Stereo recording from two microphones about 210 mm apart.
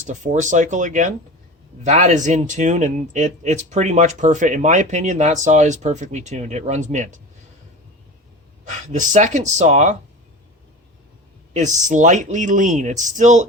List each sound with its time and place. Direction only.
0.1 s speech: 35° right (ahead or behind)
8.6 s speech: 35° right (ahead or behind)
11.5 s speech: 35° right (ahead or behind)